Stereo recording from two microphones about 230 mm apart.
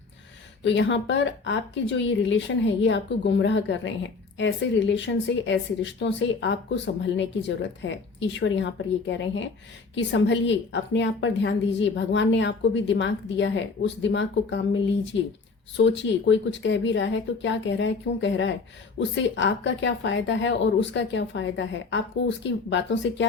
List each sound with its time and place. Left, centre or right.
0.6 s a woman's voice: left
15.8 s a woman's voice: left